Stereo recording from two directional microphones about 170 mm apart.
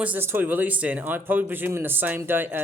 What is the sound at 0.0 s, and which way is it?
Speech, 10° right (ahead or behind).